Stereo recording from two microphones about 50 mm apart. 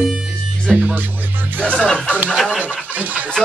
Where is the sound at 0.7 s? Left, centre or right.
Right.